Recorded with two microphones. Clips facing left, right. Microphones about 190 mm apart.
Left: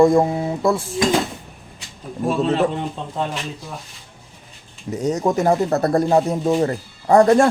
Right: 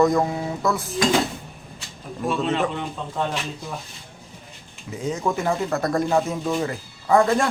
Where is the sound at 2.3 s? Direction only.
35° left (ahead or behind).